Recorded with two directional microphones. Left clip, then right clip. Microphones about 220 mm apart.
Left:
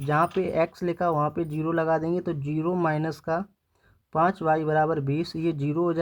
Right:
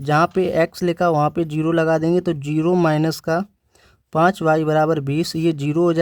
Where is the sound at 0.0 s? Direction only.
45° right (ahead or behind).